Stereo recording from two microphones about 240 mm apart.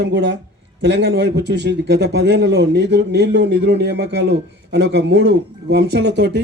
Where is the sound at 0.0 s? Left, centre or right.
Right.